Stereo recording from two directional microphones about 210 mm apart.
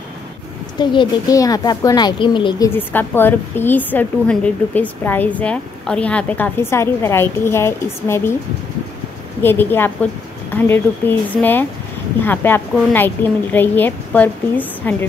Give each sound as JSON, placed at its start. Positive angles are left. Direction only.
{"t": 0.7, "sound": "a woman's voice", "side_deg": 20}
{"t": 2.7, "sound": "a woman's voice", "side_deg": 10}
{"t": 9.4, "sound": "a woman's voice", "side_deg": 10}